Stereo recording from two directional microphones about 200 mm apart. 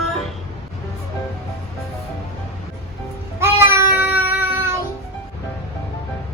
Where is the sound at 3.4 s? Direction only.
10° right (ahead or behind).